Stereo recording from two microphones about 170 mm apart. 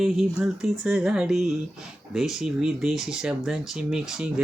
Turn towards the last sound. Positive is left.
turn(degrees=-5)  # may be behind; listen again after turning